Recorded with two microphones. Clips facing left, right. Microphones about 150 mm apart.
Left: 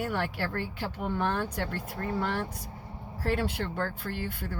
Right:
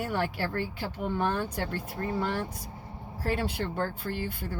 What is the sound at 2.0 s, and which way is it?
Speech, 20° right (ahead or behind).